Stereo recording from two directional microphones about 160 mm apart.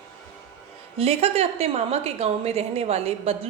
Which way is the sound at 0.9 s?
40° right (ahead or behind).